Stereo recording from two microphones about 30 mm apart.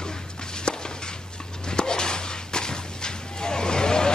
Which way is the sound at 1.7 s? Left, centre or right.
Left.